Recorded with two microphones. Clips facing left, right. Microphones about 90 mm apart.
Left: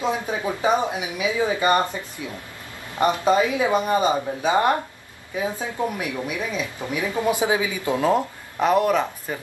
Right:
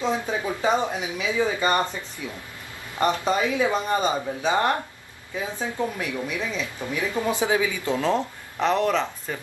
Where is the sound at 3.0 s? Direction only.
20° left (ahead or behind).